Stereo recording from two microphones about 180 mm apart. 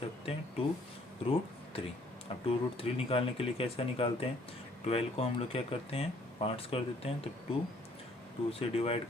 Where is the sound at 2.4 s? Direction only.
30° left (ahead or behind).